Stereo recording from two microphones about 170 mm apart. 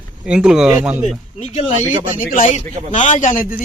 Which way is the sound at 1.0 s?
45° left (ahead or behind).